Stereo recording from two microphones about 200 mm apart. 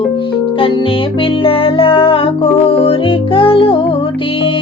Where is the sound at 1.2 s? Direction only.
25° left (ahead or behind).